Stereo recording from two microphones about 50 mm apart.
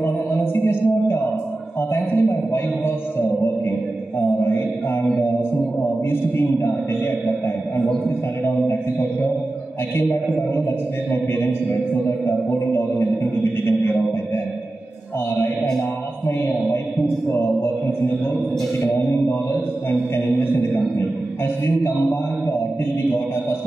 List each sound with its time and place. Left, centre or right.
0.0 s music: left
1.8 s speech: left
4.4 s speech: left
6.0 s speech: left
11.1 s speech: left
16.3 s speech: left
19.2 s speech: left